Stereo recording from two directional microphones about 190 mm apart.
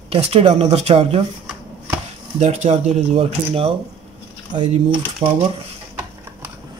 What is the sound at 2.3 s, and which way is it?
Speech, 35° right (ahead or behind).